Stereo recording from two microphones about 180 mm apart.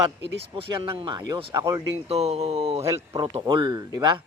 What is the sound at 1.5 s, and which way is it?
Speech, 15° right (ahead or behind).